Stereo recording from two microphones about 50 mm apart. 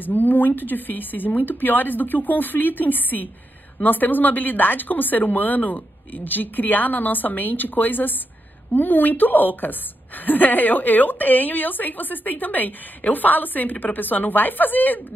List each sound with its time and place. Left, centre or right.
0.0 s a woman's voice: left